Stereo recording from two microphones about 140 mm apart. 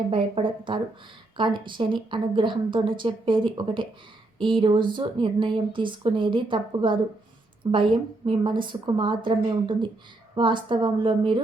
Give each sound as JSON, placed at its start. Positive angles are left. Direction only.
{"t": 0.1, "sound": "speech", "side_deg": -40}